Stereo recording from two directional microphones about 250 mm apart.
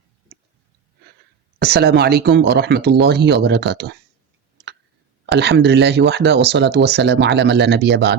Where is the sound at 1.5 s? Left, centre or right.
Right.